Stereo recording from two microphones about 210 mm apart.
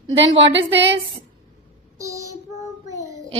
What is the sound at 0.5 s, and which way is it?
Speech, 55° right (ahead or behind).